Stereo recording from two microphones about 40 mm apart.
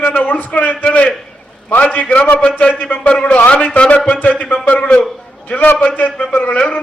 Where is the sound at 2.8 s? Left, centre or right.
Left.